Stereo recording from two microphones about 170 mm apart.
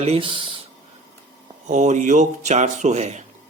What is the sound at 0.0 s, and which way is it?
Speech, 35° right (ahead or behind).